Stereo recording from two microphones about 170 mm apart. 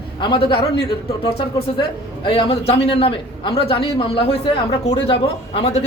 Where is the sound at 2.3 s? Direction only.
30° left (ahead or behind).